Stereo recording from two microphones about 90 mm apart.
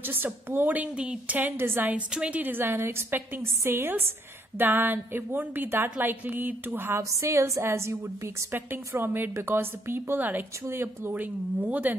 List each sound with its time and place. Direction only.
0.0 s a woman's voice: 20° right (ahead or behind)